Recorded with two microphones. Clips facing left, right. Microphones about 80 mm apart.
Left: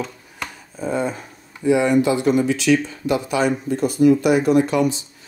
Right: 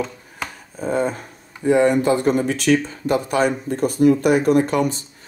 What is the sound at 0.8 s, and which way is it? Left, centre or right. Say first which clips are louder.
Speech: right 2 dB; right.